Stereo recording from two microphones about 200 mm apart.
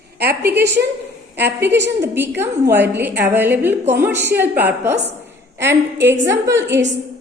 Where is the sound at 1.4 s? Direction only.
10° right (ahead or behind).